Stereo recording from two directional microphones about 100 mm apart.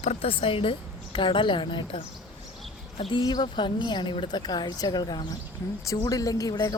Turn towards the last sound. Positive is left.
turn(degrees=40)  # may be behind; listen again after turning